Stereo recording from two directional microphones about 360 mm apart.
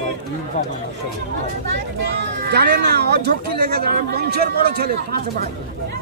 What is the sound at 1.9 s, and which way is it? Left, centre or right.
Speech, right.